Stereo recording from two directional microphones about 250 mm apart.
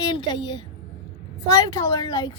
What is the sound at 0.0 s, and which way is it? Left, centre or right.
A woman's voice, centre.